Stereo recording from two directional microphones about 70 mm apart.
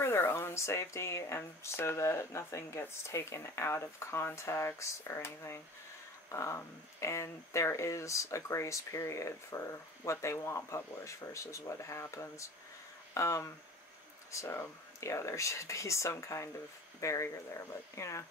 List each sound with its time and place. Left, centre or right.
0.0 s speech: left